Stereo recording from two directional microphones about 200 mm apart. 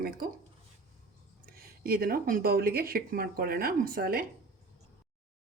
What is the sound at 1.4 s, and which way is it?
Speech, 50° right (ahead or behind).